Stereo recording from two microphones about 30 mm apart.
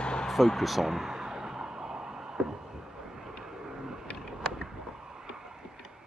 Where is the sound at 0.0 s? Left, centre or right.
Left.